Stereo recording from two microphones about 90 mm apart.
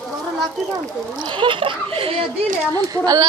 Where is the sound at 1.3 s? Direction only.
65° right (ahead or behind); by 2.3 s 90° right.